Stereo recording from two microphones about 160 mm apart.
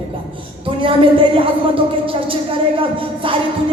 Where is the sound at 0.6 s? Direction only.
35° right (ahead or behind).